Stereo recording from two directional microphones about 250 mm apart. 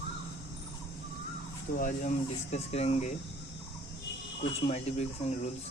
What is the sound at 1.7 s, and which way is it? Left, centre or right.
Speech, left.